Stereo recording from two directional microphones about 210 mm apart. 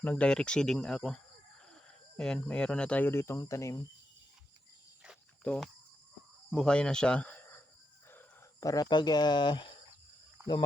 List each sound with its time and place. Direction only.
0.0 s speech: 5° left (ahead or behind)
5.4 s speech: 5° left (ahead or behind)
8.6 s speech: 15° left (ahead or behind)